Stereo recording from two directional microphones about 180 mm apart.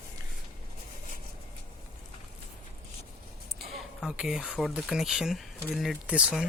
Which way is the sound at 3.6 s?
Centre (ahead or behind).